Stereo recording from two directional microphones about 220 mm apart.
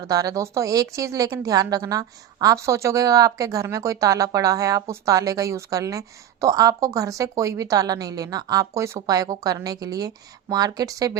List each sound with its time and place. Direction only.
0.1 s a woman's voice: 15° right (ahead or behind)